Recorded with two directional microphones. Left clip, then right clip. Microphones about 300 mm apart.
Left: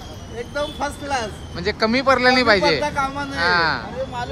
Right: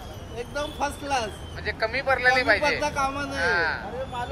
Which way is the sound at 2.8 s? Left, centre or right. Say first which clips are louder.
Left 4 dB; centre.